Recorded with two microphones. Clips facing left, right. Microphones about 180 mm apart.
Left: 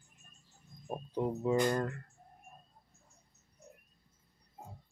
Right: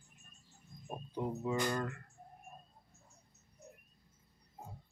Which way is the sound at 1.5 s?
40° left (ahead or behind).